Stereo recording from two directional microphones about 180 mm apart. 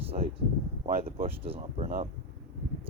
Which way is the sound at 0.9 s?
55° right (ahead or behind).